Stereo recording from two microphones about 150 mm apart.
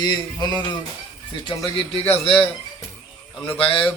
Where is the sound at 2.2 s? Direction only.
40° left (ahead or behind).